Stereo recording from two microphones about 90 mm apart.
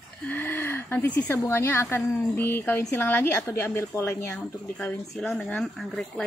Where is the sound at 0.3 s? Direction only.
25° left (ahead or behind).